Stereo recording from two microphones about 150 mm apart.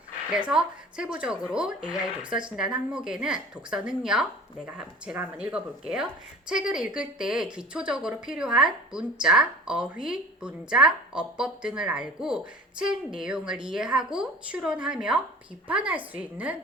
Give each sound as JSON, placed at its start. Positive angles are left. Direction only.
{"t": 0.3, "sound": "a woman's voice", "side_deg": -5}